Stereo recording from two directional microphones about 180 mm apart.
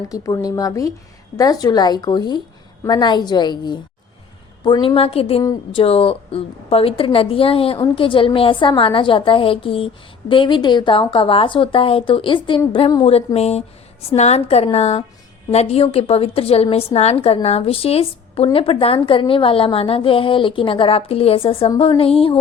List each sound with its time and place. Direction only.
0.1 s a woman's voice: 20° left (ahead or behind)
5.4 s a woman's voice: 20° left (ahead or behind)
5.8 s a woman's voice: 30° left (ahead or behind)